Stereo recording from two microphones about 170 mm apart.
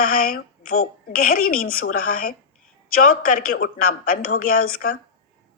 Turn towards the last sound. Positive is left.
turn(degrees=55)  # may be behind; listen again after turning